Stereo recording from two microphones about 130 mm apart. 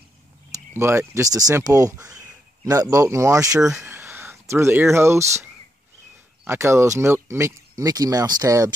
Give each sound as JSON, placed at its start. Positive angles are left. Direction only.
{"t": 0.7, "sound": "speech", "side_deg": -20}